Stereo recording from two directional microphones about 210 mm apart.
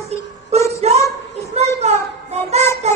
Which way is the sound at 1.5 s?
30° right (ahead or behind).